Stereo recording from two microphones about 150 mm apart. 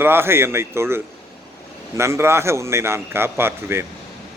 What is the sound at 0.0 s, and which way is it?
A man's voice, 15° right (ahead or behind).